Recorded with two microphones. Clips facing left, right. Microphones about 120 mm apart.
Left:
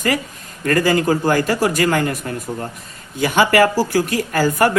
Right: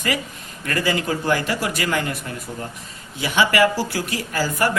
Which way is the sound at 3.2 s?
50° left (ahead or behind).